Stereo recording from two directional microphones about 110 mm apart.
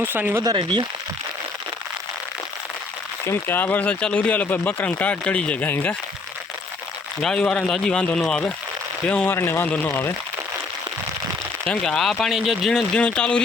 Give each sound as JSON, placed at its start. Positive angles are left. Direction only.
{"t": 0.0, "sound": "speech", "side_deg": -15}
{"t": 0.5, "sound": "speech", "side_deg": -45}
{"t": 3.2, "sound": "speech", "side_deg": 20}
{"t": 7.2, "sound": "speech", "side_deg": 5}
{"t": 11.6, "sound": "speech", "side_deg": 5}